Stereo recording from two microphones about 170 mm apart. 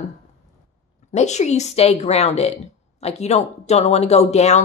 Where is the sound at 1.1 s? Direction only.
45° left (ahead or behind).